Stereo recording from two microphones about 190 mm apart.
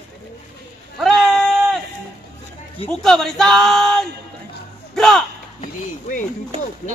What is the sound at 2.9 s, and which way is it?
Speech, centre (ahead or behind).